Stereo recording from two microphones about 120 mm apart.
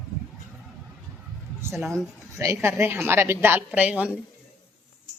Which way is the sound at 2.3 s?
25° right (ahead or behind).